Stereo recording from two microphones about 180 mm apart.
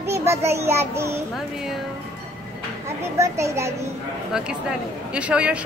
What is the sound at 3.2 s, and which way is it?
Speech, 15° right (ahead or behind).